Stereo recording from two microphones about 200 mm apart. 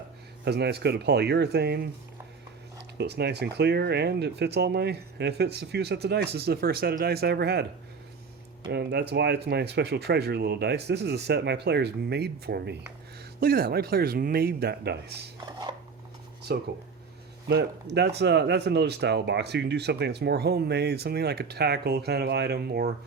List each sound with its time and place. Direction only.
0.4 s speech: 55° right (ahead or behind)
3.0 s speech: 55° right (ahead or behind)
15.7 s a sound: 25° right (ahead or behind)
16.5 s speech: 55° right (ahead or behind)